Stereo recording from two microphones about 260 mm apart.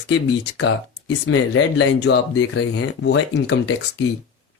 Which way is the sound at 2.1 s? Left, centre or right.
Left.